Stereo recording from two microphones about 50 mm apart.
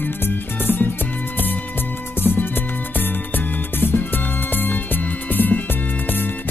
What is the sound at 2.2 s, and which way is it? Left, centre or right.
Music, left.